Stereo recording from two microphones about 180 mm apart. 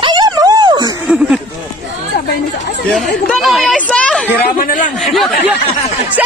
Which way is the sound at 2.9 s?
Centre (ahead or behind).